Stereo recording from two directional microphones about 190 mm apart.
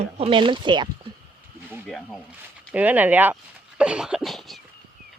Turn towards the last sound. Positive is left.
turn(degrees=0)  # may be behind; listen again after turning